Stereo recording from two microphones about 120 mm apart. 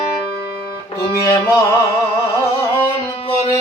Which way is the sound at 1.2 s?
25° left (ahead or behind).